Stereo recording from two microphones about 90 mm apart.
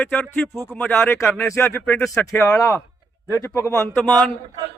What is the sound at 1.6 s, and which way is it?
Speech, 25° left (ahead or behind).